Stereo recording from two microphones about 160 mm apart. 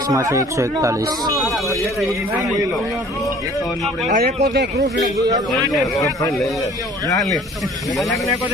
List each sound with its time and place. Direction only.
0.1 s speech: 20° right (ahead or behind)
4.1 s speech: 50° right (ahead or behind)